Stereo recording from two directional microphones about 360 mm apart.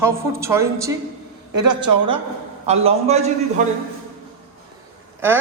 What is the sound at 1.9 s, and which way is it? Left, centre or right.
Speech, right.